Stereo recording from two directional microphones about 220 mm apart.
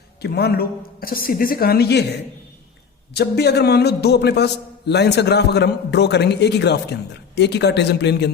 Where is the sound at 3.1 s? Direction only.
50° left (ahead or behind).